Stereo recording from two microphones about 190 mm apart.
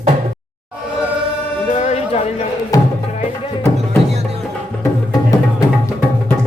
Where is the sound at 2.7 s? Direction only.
20° left (ahead or behind).